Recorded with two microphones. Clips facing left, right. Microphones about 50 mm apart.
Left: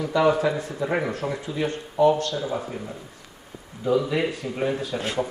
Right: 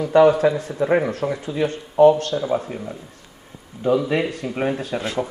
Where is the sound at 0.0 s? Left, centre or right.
Right.